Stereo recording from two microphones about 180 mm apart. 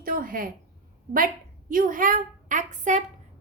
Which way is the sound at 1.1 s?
50° right (ahead or behind).